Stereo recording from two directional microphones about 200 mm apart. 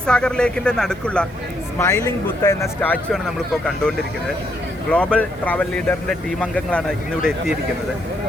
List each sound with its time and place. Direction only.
0.0 s speech: 5° left (ahead or behind)
1.8 s speech: 15° left (ahead or behind)